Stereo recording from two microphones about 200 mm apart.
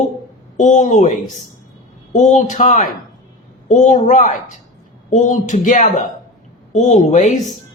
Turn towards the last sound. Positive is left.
turn(degrees=35)  # may be behind; listen again after turning